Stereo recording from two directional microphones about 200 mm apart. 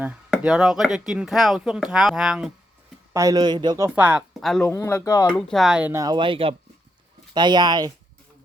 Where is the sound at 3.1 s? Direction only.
15° right (ahead or behind); by 4.7 s centre (ahead or behind).